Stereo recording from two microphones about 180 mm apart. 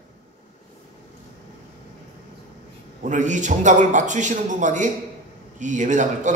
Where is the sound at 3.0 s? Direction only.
45° right (ahead or behind).